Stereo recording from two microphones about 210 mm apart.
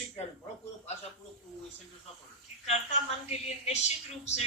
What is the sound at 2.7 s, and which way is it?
A woman's voice, 30° left (ahead or behind).